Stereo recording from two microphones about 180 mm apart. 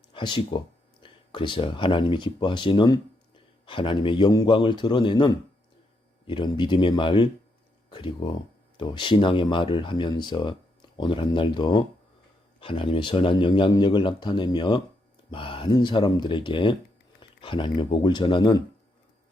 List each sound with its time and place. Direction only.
0.1 s speech: 25° left (ahead or behind)